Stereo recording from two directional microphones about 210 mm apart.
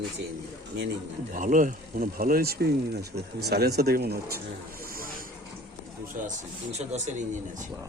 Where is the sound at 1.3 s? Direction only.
40° right (ahead or behind).